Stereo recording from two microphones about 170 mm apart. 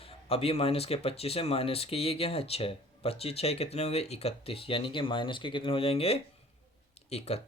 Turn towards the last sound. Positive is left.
turn(degrees=35)  # may be behind; listen again after turning